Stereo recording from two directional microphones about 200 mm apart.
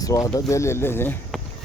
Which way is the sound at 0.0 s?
15° left (ahead or behind).